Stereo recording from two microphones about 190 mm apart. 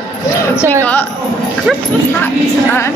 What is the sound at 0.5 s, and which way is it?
Speech, 10° left (ahead or behind).